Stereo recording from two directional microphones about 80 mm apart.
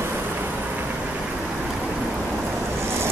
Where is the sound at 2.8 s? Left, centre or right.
Right.